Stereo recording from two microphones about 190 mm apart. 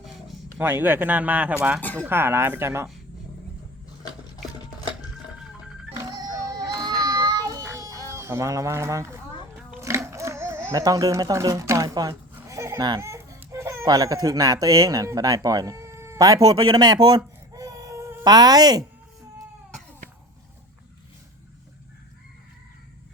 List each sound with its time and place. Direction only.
0.6 s speech: 10° right (ahead or behind)
1.8 s speech: 10° left (ahead or behind)
2.0 s speech: 10° right (ahead or behind)
5.9 s children playing: 20° right (ahead or behind)